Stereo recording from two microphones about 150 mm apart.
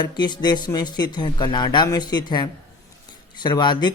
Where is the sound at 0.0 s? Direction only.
30° left (ahead or behind).